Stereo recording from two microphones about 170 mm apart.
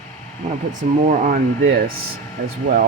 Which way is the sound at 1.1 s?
55° right (ahead or behind).